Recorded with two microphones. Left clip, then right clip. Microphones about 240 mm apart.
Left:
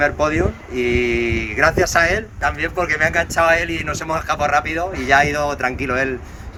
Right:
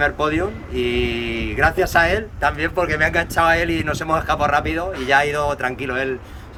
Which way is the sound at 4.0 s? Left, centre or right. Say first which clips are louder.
Right 3 dB; centre.